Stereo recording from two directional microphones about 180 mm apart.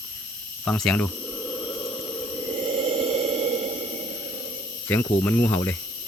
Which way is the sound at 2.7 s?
35° right (ahead or behind).